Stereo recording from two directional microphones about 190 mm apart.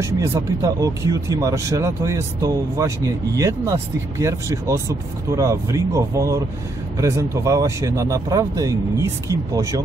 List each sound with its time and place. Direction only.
0.0 s speech: 15° right (ahead or behind)